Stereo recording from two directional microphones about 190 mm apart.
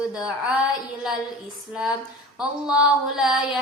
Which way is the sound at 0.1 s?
5° right (ahead or behind).